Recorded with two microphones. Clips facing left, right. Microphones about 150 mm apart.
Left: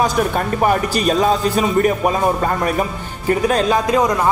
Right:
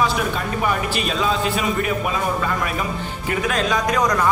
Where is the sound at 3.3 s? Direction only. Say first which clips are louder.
Left 6 dB; 35° left (ahead or behind).